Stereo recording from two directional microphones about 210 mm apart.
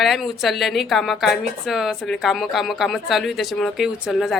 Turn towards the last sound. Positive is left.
turn(degrees=0)  # may be behind; listen again after turning